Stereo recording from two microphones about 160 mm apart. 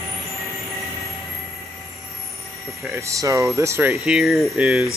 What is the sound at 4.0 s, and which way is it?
Speech, centre (ahead or behind).